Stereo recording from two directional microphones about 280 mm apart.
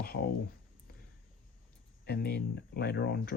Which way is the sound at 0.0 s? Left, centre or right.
Left.